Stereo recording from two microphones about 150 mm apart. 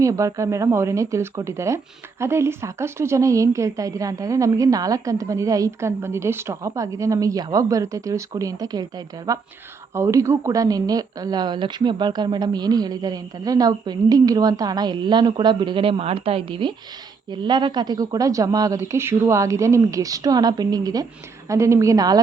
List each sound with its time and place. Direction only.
0.0 s speech: 20° right (ahead or behind)